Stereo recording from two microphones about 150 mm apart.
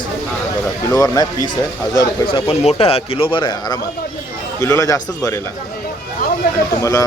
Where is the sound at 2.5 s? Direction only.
40° left (ahead or behind).